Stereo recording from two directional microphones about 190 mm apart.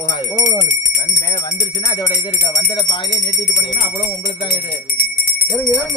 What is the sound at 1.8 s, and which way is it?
Speech, 15° left (ahead or behind).